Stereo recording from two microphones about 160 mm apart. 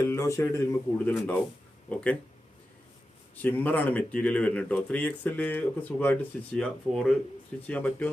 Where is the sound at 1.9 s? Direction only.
5° left (ahead or behind).